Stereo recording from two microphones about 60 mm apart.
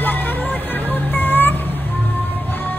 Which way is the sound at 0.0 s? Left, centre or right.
Left.